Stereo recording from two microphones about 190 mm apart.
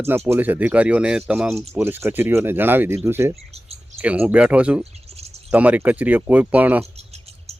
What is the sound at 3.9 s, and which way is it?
Speech, 10° right (ahead or behind).